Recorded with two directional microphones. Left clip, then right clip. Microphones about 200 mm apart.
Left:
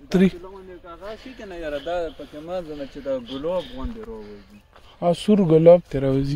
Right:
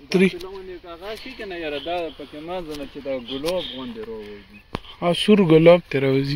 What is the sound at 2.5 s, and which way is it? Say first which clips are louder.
Speech: left 1 dB; centre (ahead or behind).